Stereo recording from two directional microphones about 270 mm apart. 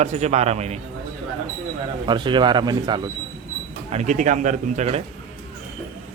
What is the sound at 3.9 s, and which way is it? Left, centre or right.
A man's voice, right.